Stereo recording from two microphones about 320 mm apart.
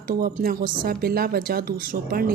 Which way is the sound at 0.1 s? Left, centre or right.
Right.